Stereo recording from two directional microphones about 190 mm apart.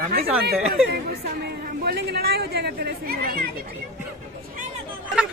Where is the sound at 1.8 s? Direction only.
55° right (ahead or behind).